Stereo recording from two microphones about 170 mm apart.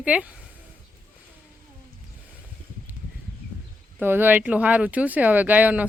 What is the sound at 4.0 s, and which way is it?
Speech, 10° right (ahead or behind).